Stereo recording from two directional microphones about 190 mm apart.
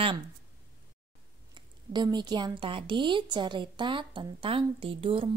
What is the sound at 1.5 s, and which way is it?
A woman's voice, 25° right (ahead or behind).